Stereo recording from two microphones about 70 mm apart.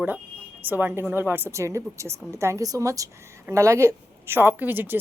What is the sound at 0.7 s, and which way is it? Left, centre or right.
A woman's voice, right.